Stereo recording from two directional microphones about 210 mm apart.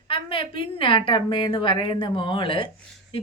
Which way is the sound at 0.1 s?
25° left (ahead or behind).